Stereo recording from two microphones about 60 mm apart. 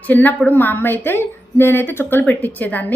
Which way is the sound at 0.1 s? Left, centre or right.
Left.